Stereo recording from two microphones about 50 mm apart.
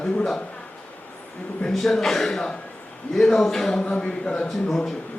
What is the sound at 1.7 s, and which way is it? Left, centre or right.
Speech, centre.